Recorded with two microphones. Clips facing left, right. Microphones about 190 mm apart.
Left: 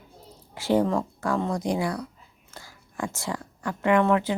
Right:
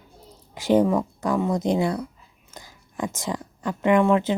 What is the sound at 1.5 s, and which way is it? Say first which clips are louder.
Speech: right 4 dB; 25° right (ahead or behind).